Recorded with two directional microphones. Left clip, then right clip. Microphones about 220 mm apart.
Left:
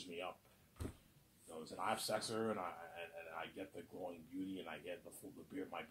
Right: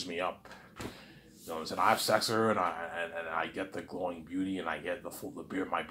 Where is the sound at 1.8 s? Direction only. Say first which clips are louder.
Right 14 dB; 20° right (ahead or behind).